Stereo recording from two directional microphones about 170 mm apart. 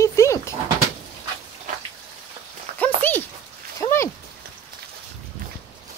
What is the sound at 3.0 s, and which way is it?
Dog, 10° left (ahead or behind).